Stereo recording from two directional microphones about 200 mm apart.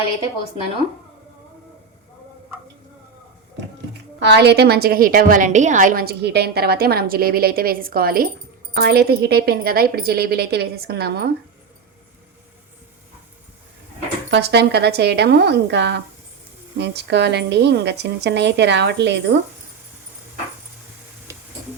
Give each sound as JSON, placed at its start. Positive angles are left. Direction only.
{"t": 4.2, "sound": "a woman's voice", "side_deg": -55}
{"t": 14.3, "sound": "a woman's voice", "side_deg": -55}
{"t": 21.3, "sound": "a sound", "side_deg": -15}